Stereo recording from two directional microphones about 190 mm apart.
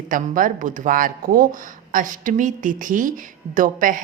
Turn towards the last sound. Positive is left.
turn(degrees=-45)  # may be behind; listen again after turning